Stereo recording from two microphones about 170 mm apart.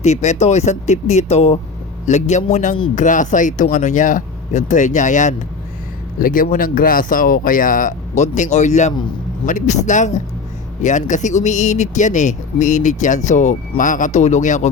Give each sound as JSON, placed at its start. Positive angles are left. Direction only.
{"t": 0.0, "sound": "speech", "side_deg": 40}